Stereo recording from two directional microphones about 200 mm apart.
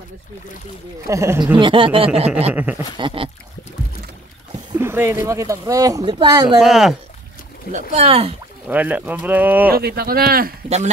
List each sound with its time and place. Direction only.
1.0 s speech: 15° right (ahead or behind)
1.6 s speech: 25° right (ahead or behind)
2.5 s speech: 10° right (ahead or behind)
3.0 s speech: 25° right (ahead or behind)
4.7 s speech: 10° right (ahead or behind)
6.6 s speech: centre (ahead or behind)
7.7 s speech: 30° right (ahead or behind)
8.6 s speech: 10° right (ahead or behind)
9.7 s speech: 50° right (ahead or behind)